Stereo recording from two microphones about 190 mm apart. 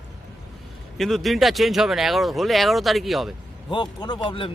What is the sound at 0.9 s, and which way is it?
Speech, centre (ahead or behind).